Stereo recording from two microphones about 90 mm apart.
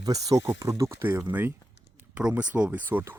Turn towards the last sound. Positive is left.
turn(degrees=-20)  # may be behind; listen again after turning